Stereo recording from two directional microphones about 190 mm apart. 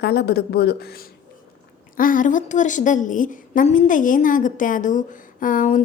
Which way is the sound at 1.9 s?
45° left (ahead or behind).